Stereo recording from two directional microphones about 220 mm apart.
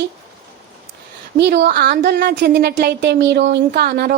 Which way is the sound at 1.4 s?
50° right (ahead or behind).